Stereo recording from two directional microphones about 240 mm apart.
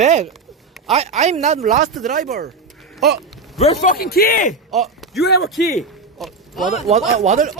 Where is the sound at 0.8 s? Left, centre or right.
Centre.